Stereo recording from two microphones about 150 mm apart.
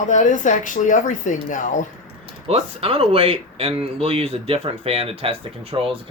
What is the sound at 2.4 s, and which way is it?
Speech, 40° right (ahead or behind).